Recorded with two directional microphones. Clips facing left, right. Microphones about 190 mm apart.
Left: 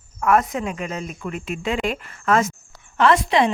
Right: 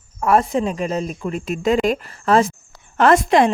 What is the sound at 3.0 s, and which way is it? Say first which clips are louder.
Speech: right 3 dB; 45° right (ahead or behind).